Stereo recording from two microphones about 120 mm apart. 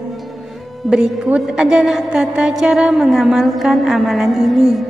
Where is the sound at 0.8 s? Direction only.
5° right (ahead or behind).